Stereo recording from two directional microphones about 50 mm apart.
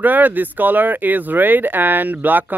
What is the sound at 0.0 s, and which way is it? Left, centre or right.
Speech, right.